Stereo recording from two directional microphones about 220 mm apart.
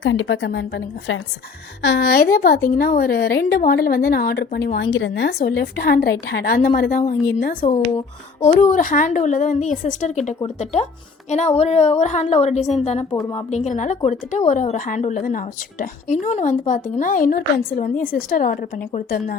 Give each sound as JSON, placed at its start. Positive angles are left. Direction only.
{"t": 0.0, "sound": "a woman's voice", "side_deg": 60}
{"t": 13.1, "sound": "a woman's voice", "side_deg": 15}
{"t": 13.5, "sound": "a woman's voice", "side_deg": 30}